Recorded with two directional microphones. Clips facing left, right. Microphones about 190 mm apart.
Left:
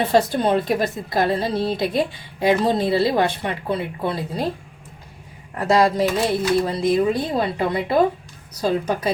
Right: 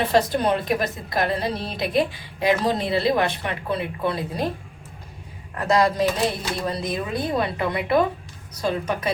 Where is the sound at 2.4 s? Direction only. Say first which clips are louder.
Left 3 dB; 30° left (ahead or behind).